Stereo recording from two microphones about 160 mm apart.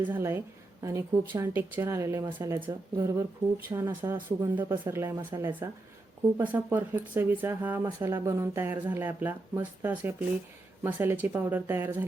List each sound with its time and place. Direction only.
0.0 s speech: 15° right (ahead or behind)